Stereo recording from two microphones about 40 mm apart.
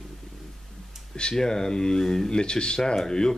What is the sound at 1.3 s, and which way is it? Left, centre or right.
Speech, centre.